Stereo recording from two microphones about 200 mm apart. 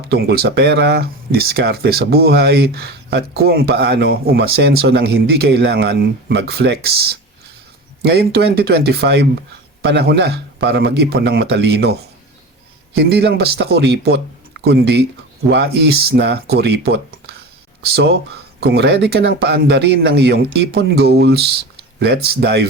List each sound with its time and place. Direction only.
0.1 s a man's voice: 55° right (ahead or behind)
13.0 s a man's voice: 55° right (ahead or behind)